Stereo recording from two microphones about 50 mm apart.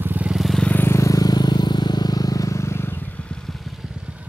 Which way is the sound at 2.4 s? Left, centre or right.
Left.